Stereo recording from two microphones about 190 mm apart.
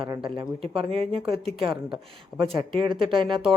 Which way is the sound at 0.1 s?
25° right (ahead or behind).